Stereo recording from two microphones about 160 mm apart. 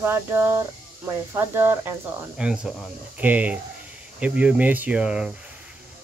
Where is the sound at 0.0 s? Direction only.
15° right (ahead or behind).